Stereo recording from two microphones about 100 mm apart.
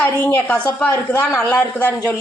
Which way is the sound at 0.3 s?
15° left (ahead or behind).